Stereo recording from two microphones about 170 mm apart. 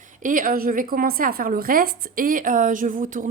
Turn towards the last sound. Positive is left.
turn(degrees=-50)  # may be behind; listen again after turning